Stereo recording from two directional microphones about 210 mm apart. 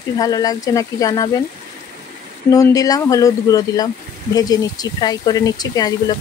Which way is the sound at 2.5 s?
15° left (ahead or behind).